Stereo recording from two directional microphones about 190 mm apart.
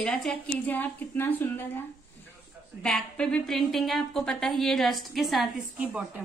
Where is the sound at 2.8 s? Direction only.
5° left (ahead or behind).